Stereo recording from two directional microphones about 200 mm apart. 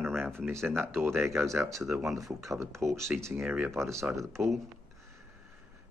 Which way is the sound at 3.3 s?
Centre (ahead or behind).